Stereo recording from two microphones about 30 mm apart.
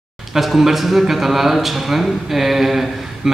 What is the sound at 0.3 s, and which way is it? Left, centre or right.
A man's voice, centre.